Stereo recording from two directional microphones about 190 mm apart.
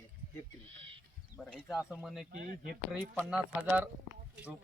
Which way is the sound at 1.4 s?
Centre (ahead or behind).